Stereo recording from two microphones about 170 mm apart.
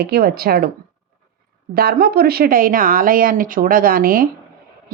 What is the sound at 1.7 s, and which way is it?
A woman's voice, 60° right (ahead or behind).